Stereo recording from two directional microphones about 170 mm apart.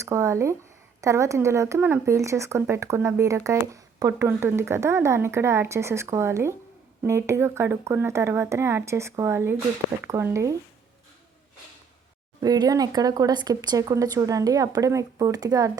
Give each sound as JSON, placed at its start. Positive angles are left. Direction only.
{"t": 0.0, "sound": "speech", "side_deg": -15}
{"t": 12.4, "sound": "speech", "side_deg": -20}